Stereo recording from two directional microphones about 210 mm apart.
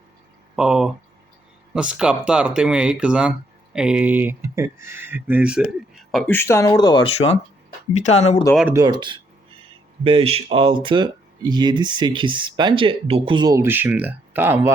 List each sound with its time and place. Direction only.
0.5 s speech: 5° right (ahead or behind); by 8.4 s 30° left (ahead or behind)
8.7 s speech: 20° right (ahead or behind)